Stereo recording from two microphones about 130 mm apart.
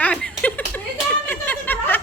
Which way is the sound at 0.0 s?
10° left (ahead or behind).